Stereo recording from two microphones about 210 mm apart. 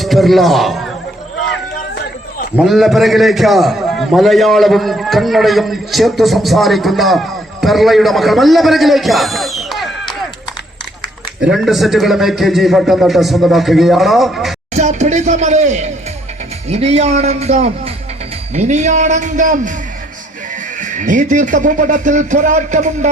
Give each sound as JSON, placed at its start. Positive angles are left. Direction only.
{"t": 0.0, "sound": "a man's voice", "side_deg": 0}
{"t": 2.6, "sound": "a man's voice", "side_deg": 0}
{"t": 11.4, "sound": "a man's voice", "side_deg": 0}
{"t": 14.7, "sound": "speech", "side_deg": -30}
{"t": 20.7, "sound": "speech", "side_deg": -35}